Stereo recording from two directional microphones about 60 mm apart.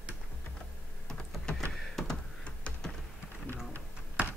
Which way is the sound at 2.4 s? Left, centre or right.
Centre.